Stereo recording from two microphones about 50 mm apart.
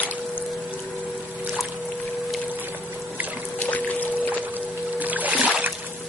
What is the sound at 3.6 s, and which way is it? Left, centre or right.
Music, left.